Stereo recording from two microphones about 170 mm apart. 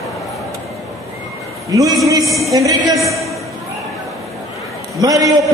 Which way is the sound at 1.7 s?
20° right (ahead or behind).